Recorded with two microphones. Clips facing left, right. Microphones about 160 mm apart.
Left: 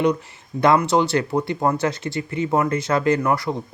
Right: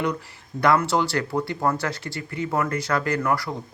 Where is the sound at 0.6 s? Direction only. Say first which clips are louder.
Left 3 dB; 20° left (ahead or behind).